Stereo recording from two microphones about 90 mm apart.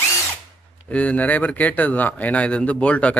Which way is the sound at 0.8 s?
15° left (ahead or behind).